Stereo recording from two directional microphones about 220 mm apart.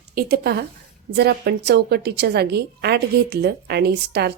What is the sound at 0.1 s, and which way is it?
A woman's voice, 45° right (ahead or behind).